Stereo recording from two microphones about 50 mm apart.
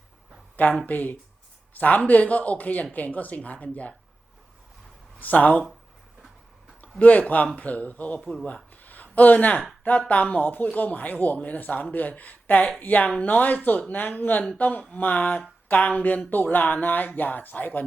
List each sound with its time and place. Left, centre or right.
0.5 s speech: left
5.2 s speech: left
7.0 s speech: left
8.7 s a sound: left
9.8 s speech: left